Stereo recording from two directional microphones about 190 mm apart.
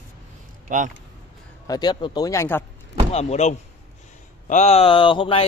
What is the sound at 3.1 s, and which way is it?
Speech, 35° left (ahead or behind).